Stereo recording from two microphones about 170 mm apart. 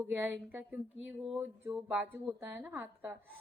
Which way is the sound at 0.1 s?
10° right (ahead or behind).